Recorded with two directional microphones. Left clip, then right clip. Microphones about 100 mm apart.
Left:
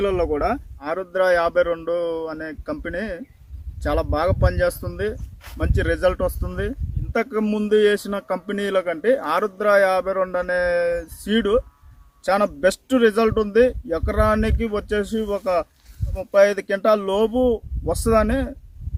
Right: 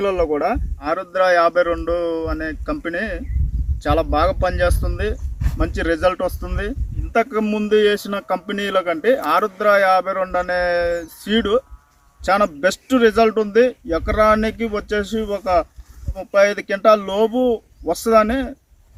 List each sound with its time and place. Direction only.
0.0 s speech: 30° left (ahead or behind)
0.8 s a man's voice: 55° left (ahead or behind)
4.1 s a man's voice: 30° left (ahead or behind)